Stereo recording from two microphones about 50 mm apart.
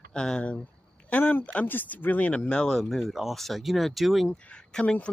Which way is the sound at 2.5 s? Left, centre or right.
Centre.